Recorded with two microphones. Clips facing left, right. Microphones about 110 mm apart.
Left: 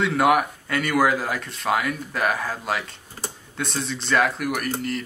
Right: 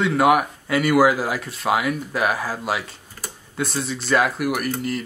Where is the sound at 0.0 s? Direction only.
Centre (ahead or behind).